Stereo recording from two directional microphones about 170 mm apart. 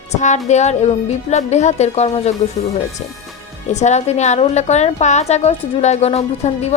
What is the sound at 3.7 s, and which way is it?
A woman's voice, 40° left (ahead or behind).